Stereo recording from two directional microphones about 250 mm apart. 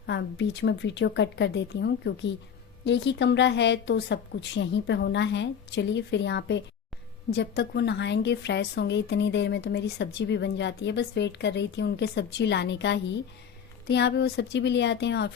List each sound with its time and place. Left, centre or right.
0.0 s a woman's voice: left